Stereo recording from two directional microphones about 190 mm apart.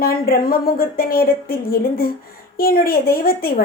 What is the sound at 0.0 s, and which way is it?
Speech, 50° left (ahead or behind).